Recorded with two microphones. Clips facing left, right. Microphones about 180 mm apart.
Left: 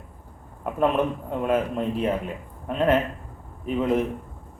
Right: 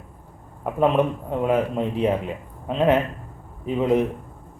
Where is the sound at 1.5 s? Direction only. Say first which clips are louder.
Right 2 dB; 15° right (ahead or behind).